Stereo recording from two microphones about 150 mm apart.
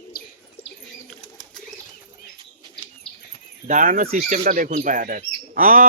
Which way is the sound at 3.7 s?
60° right (ahead or behind).